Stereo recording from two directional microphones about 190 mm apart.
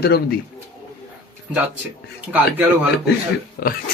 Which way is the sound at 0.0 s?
55° left (ahead or behind).